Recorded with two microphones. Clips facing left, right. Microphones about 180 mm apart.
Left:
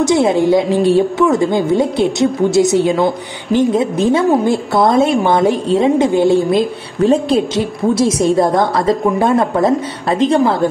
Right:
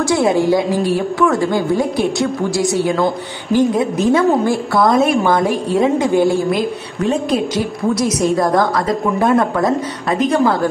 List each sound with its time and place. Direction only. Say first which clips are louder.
0.0 s a woman's voice: left 2 dB; 20° left (ahead or behind)